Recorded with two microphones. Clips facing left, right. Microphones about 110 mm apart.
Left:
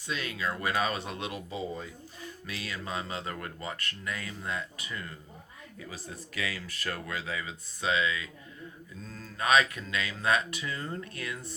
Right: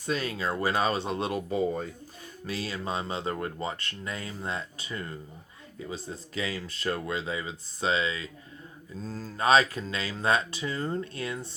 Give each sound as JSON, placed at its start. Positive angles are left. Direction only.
{"t": 0.0, "sound": "speech", "side_deg": -40}
{"t": 1.5, "sound": "speech", "side_deg": -50}
{"t": 2.5, "sound": "speech", "side_deg": -30}